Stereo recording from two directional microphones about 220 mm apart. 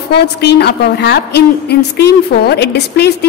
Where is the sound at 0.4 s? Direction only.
50° left (ahead or behind).